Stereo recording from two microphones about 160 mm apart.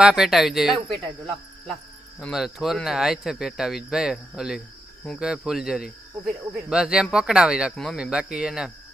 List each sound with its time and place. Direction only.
0.0 s speech: 5° right (ahead or behind)